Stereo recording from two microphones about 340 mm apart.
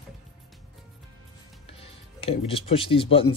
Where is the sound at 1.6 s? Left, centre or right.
Centre.